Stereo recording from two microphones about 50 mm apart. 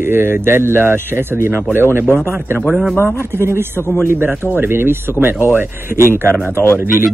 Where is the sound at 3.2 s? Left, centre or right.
Right.